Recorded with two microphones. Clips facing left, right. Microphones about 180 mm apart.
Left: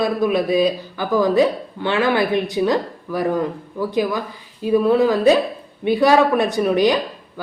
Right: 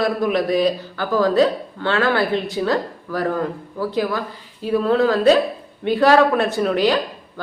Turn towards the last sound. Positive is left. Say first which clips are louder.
# left 1 dB
turn(degrees=15)  # may be behind; listen again after turning